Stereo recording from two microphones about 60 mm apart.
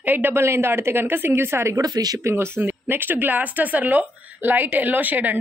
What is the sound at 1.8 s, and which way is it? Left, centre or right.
Speech, right.